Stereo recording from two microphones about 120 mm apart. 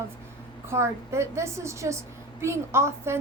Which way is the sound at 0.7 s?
25° right (ahead or behind).